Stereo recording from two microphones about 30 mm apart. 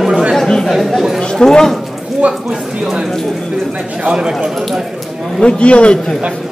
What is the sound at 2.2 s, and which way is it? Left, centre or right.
Speech, right.